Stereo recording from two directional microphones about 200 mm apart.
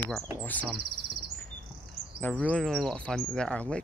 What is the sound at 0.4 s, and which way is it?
Speech, 10° left (ahead or behind).